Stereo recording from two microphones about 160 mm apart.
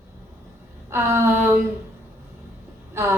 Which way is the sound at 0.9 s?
15° right (ahead or behind).